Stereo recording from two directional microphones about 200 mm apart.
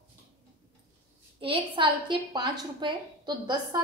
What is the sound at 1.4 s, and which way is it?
A woman's voice, 25° right (ahead or behind).